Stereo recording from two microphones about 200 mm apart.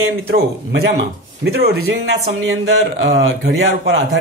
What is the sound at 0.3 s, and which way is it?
Speech, 50° right (ahead or behind).